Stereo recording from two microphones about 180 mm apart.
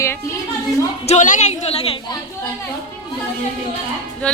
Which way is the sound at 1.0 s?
40° left (ahead or behind).